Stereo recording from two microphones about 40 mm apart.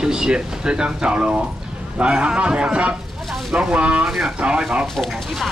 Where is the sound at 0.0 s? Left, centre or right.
Centre.